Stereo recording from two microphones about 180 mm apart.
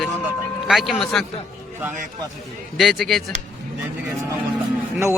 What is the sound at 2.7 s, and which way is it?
Speech, centre (ahead or behind).